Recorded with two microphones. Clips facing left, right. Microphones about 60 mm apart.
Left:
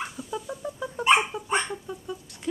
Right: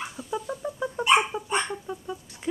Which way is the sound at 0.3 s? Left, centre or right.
Centre.